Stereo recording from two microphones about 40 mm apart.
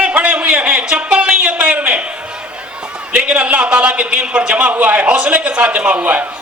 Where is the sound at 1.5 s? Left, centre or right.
Right.